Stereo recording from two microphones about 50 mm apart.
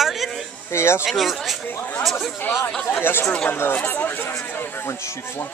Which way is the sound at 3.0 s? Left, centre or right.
Left.